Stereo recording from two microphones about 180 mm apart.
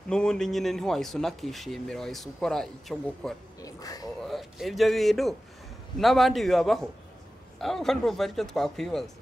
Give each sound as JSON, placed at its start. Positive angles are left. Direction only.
{"t": 0.1, "sound": "speech", "side_deg": 5}
{"t": 3.6, "sound": "a sound", "side_deg": 20}
{"t": 4.2, "sound": "speech", "side_deg": 0}